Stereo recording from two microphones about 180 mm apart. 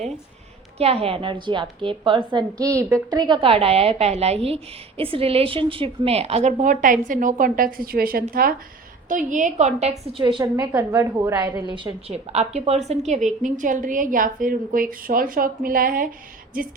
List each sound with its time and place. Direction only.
0.8 s a woman's voice: 35° right (ahead or behind)
10.2 s a woman's voice: 25° right (ahead or behind); by 16.0 s 50° right (ahead or behind)